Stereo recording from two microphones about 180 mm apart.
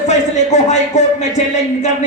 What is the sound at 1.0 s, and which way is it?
Speech, 40° left (ahead or behind).